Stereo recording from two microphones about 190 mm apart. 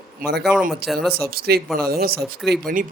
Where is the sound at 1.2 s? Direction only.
55° right (ahead or behind).